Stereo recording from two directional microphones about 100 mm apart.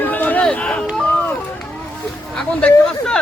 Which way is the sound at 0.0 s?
15° left (ahead or behind).